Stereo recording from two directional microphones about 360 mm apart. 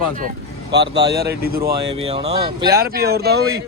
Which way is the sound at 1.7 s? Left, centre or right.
Centre.